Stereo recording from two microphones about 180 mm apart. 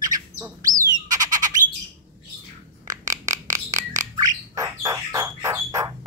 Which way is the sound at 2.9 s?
20° right (ahead or behind).